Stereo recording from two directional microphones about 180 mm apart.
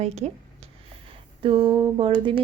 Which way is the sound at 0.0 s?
35° right (ahead or behind).